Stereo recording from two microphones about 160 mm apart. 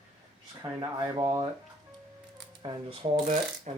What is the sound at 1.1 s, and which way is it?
Speech, 25° right (ahead or behind).